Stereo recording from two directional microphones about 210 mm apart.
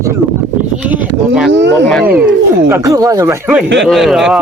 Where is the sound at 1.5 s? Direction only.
55° right (ahead or behind).